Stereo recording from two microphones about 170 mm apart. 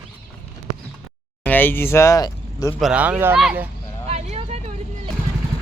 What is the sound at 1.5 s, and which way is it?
Speech, 10° left (ahead or behind).